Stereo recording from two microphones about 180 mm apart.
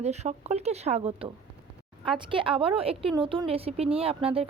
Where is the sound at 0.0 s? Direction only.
40° right (ahead or behind).